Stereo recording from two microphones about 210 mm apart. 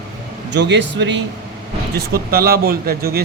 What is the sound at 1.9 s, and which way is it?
Speech, 45° right (ahead or behind).